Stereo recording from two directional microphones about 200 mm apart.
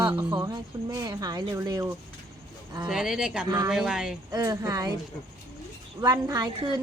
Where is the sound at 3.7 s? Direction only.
5° right (ahead or behind).